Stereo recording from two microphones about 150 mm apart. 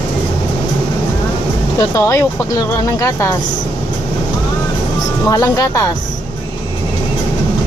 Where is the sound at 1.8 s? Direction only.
20° left (ahead or behind).